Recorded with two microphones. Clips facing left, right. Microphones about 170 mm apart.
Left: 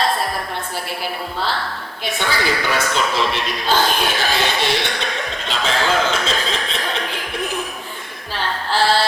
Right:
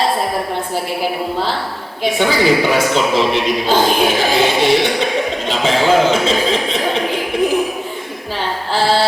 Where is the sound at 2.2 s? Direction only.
15° right (ahead or behind).